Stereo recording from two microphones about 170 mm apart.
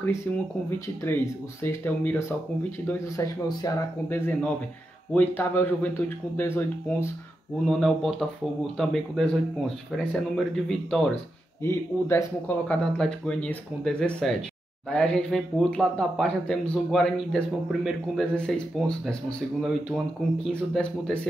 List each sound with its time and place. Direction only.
0.7 s speech: 15° left (ahead or behind)
4.3 s speech: 5° left (ahead or behind)
7.6 s speech: 5° left (ahead or behind)
11.6 s speech: 15° left (ahead or behind)